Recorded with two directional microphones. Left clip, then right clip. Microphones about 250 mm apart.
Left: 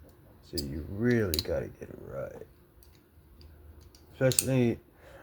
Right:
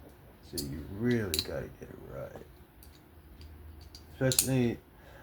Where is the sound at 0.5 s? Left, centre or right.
Left.